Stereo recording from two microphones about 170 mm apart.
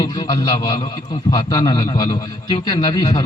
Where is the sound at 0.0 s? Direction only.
25° left (ahead or behind).